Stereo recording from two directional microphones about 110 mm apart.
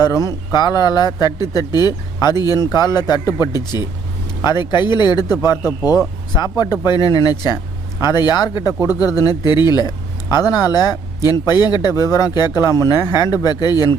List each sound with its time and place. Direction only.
0.0 s speech: 30° left (ahead or behind)